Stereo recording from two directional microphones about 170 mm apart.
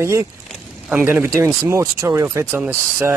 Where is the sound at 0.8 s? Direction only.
10° right (ahead or behind).